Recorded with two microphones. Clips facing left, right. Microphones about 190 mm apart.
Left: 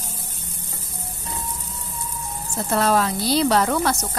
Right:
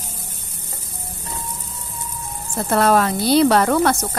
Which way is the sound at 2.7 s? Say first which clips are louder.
Right 4 dB; 60° right (ahead or behind).